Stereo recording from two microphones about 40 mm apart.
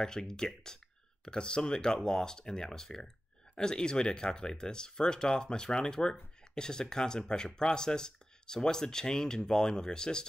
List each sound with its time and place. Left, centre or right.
0.0 s speech: centre